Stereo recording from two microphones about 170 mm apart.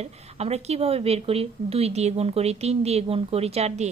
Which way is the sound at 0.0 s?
40° right (ahead or behind).